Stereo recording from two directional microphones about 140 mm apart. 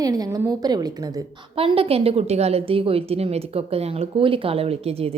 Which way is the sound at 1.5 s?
40° right (ahead or behind).